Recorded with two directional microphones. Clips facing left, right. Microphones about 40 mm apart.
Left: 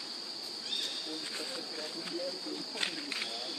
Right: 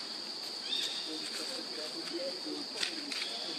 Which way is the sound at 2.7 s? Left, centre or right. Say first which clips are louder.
Left 2 dB; left.